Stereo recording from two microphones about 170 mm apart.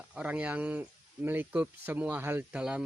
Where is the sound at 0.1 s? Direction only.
10° right (ahead or behind).